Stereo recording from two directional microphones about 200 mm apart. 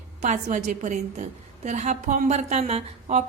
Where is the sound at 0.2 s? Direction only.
40° right (ahead or behind).